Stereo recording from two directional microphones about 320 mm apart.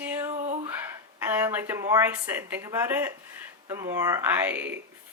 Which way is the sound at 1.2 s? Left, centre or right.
Centre.